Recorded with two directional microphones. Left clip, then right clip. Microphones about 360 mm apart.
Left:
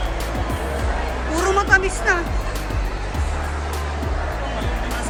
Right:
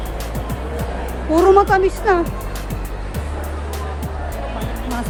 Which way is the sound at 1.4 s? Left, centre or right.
Centre.